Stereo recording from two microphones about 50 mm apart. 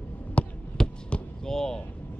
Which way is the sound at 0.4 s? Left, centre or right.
Left.